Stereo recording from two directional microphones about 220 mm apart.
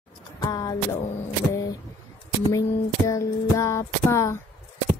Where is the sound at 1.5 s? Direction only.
15° left (ahead or behind).